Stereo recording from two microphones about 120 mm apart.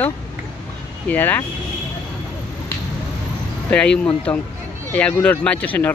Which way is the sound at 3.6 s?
10° left (ahead or behind).